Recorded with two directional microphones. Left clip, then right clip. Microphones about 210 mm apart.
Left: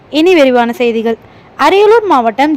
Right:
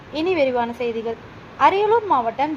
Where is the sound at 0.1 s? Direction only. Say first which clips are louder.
Left 12 dB; 55° left (ahead or behind).